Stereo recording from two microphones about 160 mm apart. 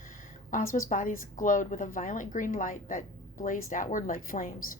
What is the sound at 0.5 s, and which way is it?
Speech, 55° left (ahead or behind).